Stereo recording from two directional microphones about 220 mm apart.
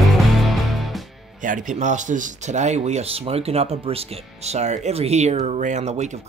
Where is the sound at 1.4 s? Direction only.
35° right (ahead or behind).